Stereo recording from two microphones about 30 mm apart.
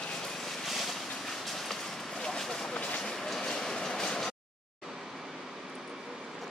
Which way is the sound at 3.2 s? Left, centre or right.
Centre.